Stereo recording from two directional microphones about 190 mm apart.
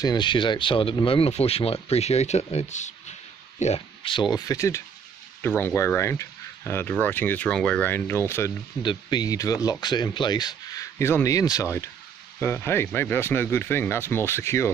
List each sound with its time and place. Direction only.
0.0 s speech: 25° left (ahead or behind)